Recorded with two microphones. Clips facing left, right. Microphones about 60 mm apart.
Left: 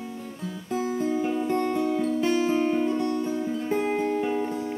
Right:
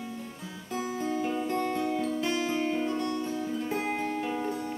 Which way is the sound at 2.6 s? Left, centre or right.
Centre.